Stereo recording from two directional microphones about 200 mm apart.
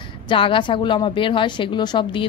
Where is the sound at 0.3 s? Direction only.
25° left (ahead or behind).